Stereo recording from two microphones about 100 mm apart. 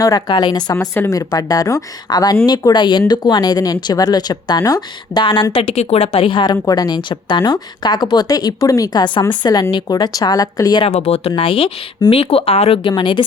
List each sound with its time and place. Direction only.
0.0 s a woman's voice: 40° left (ahead or behind)
5.5 s a woman's voice: 80° left; by 10.8 s 40° left (ahead or behind)
10.8 s speech: 90° left
11.3 s speech: 70° left (ahead or behind)
12.9 s a woman's voice: 55° left (ahead or behind)